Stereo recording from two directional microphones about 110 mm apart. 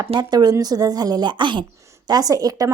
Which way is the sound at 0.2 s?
35° right (ahead or behind).